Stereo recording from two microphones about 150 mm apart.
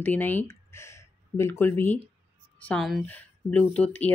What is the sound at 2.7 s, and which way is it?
A woman's voice, centre (ahead or behind).